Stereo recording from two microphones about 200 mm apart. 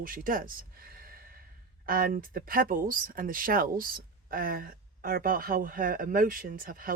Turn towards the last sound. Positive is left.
turn(degrees=-45)  # may be behind; listen again after turning